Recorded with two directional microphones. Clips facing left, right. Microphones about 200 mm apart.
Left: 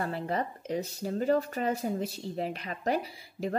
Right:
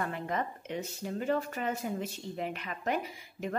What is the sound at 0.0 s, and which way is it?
Speech, 35° left (ahead or behind).